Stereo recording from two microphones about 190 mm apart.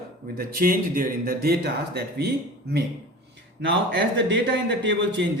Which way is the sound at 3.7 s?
65° right (ahead or behind).